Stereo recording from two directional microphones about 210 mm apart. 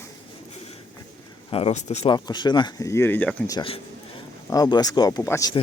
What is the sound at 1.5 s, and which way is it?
Speech, 25° left (ahead or behind).